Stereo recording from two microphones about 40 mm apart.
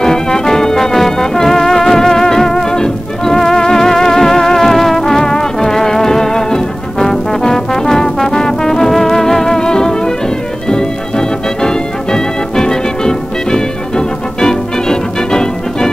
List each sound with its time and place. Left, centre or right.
0.0 s music: centre